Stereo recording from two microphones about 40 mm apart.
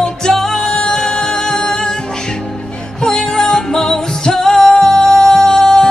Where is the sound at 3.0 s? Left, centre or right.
Centre.